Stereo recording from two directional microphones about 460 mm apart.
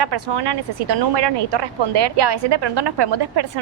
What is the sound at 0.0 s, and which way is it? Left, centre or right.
Speech, right.